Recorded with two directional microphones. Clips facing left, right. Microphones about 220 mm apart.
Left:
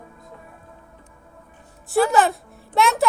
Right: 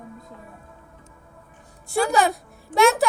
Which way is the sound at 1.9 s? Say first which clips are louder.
Left 3 dB; centre (ahead or behind).